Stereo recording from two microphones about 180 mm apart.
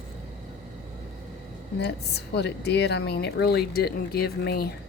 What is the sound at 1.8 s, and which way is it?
A woman's voice, 65° left (ahead or behind).